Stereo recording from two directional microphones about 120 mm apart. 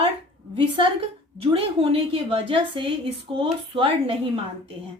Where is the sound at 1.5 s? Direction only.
50° right (ahead or behind).